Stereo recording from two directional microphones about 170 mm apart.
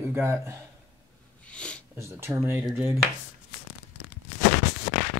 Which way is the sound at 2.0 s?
15° right (ahead or behind).